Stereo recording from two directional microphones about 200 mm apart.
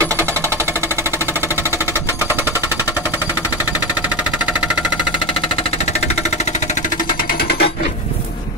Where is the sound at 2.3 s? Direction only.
10° right (ahead or behind).